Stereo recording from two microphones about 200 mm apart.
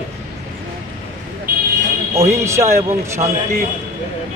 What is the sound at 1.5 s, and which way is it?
Vehicle, 45° right (ahead or behind).